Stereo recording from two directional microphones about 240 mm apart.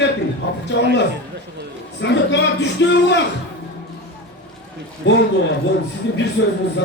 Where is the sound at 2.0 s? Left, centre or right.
Left.